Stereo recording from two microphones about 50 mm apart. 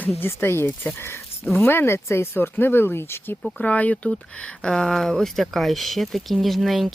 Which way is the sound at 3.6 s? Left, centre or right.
Left.